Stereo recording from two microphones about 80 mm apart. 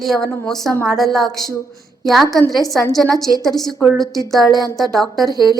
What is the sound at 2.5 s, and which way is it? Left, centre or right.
A woman's voice, centre.